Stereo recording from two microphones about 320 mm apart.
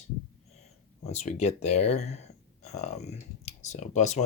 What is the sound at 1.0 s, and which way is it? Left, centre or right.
Speech, left.